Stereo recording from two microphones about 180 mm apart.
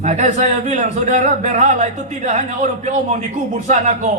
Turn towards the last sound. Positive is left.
turn(degrees=-40)  # may be behind; listen again after turning